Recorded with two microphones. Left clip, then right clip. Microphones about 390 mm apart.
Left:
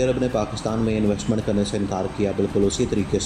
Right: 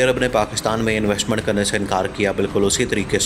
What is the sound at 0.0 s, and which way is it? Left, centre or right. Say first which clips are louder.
Speech: right 5 dB; right.